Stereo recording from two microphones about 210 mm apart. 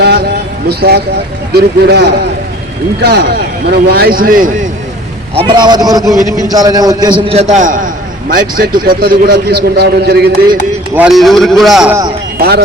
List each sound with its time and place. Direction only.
0.0 s a sound: 50° right (ahead or behind)
0.7 s a man's voice: 50° right (ahead or behind)
5.3 s a man's voice: 25° right (ahead or behind)
6.2 s a man's voice: 15° left (ahead or behind)
6.5 s a man's voice: 20° right (ahead or behind); by 10.6 s 50° right (ahead or behind)
10.9 s a man's voice: 5° right (ahead or behind)
12.4 s a man's voice: 50° right (ahead or behind)